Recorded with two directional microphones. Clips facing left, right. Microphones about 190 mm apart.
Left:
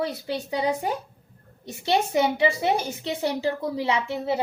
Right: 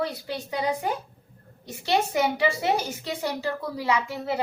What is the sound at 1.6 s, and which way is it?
A woman's voice, 25° left (ahead or behind).